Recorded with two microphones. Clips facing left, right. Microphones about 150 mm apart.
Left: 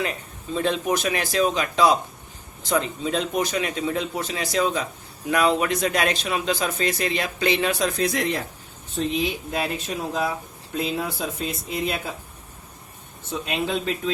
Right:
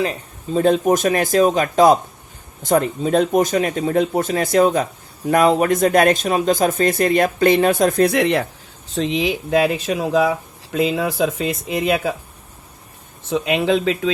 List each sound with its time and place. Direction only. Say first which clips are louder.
0.0 s speech: right 6 dB; 35° right (ahead or behind); by 8.4 s 70° right (ahead or behind)
9.0 s speech: right 5 dB; 90° right
13.3 s speech: right 8 dB; 90° right